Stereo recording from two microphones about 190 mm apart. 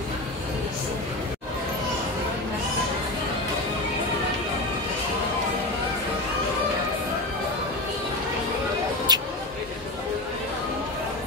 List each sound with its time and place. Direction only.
9.1 s vehicle: 20° right (ahead or behind)